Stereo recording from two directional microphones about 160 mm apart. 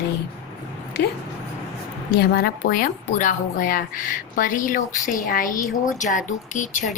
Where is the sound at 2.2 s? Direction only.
70° left (ahead or behind); by 6.8 s 55° left (ahead or behind).